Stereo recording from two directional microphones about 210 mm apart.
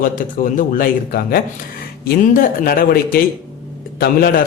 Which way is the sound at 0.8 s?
45° left (ahead or behind).